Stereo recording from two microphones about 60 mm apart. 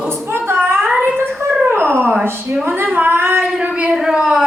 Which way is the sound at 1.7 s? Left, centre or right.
Right.